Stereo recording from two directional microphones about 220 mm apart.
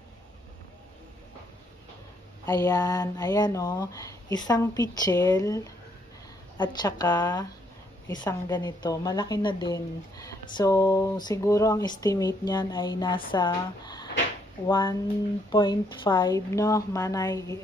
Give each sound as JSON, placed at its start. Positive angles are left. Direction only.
{"t": 2.4, "sound": "speech", "side_deg": 15}